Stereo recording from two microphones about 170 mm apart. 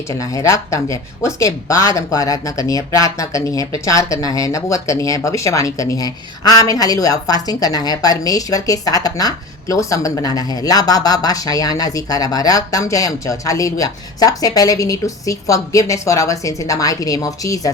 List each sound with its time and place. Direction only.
0.1 s speech: 20° left (ahead or behind)